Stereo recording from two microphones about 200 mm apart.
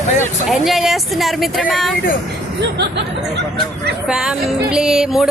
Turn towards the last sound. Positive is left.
turn(degrees=-5)  # may be behind; listen again after turning